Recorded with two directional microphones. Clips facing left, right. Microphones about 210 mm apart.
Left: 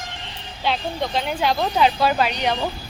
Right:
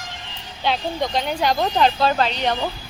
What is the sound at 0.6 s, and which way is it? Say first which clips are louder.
Speech: right 1 dB; centre (ahead or behind).